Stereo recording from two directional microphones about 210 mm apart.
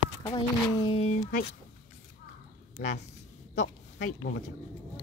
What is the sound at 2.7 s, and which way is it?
A woman's voice, 35° left (ahead or behind).